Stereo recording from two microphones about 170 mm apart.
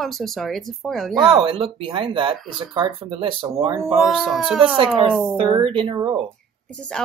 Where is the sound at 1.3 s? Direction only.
30° right (ahead or behind).